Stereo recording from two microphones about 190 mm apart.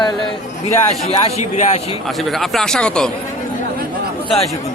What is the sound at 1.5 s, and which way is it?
Speech, 35° left (ahead or behind).